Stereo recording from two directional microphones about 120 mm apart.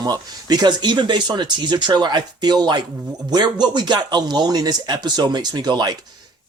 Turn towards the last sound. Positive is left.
turn(degrees=-35)  # may be behind; listen again after turning